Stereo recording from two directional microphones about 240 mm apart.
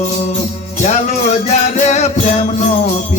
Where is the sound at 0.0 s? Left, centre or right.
Left.